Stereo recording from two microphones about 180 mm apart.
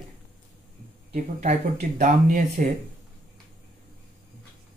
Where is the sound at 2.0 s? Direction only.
45° right (ahead or behind).